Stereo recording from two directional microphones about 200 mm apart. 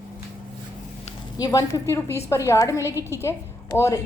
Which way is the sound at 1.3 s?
20° left (ahead or behind).